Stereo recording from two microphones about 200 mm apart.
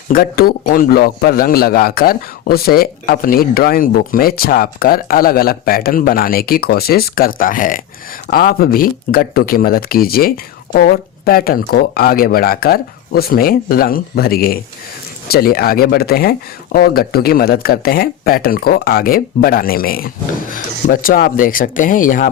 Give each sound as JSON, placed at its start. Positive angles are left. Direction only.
{"t": 0.1, "sound": "a man's voice", "side_deg": 50}